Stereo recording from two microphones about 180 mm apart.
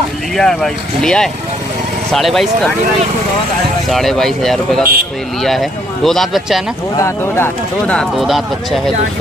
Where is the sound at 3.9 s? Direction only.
Centre (ahead or behind).